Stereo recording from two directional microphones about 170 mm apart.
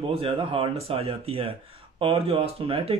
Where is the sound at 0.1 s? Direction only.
30° right (ahead or behind).